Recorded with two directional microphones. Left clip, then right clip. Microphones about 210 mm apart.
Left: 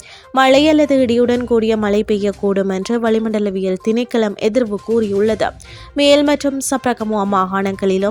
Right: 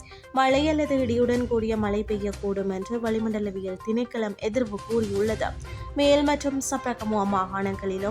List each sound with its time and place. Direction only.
0.3 s a woman's voice: 35° left (ahead or behind)